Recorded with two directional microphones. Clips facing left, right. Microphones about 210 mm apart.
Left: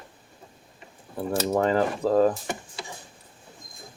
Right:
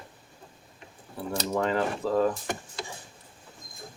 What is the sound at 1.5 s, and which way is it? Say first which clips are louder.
Speech: left 3 dB; 40° left (ahead or behind).